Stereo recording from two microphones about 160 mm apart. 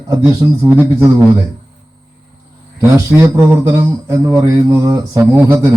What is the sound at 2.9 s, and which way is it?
Speech, 20° right (ahead or behind).